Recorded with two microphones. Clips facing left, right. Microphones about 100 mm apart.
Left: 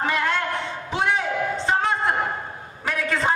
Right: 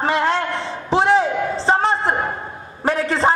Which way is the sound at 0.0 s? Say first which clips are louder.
Right 5 dB; 30° right (ahead or behind).